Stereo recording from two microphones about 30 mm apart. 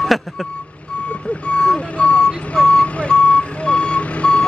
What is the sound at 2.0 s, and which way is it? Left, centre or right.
Vehicle, left.